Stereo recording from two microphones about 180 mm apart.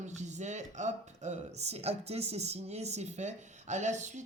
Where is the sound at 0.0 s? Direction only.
40° right (ahead or behind).